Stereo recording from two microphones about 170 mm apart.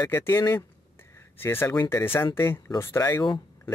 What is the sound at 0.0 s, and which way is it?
Speech, 15° left (ahead or behind).